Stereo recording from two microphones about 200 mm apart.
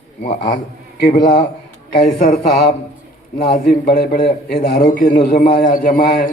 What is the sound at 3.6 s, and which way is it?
Speech, 50° left (ahead or behind).